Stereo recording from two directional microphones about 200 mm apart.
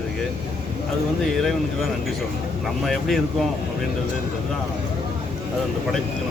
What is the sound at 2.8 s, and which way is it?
Speech, centre (ahead or behind).